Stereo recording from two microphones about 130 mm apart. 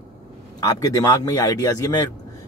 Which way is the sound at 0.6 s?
25° left (ahead or behind).